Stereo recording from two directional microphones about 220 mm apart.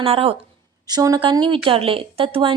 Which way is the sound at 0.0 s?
25° right (ahead or behind).